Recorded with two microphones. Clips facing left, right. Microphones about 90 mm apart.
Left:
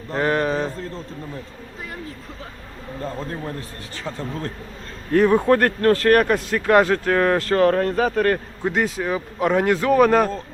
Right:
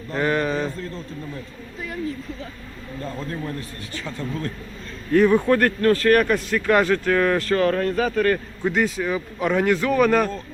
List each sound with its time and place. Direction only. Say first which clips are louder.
0.1 s speech: left 1 dB; 25° left (ahead or behind)
3.0 s speech: left 1 dB; 30° left (ahead or behind)
8.6 s speech: even; 20° left (ahead or behind)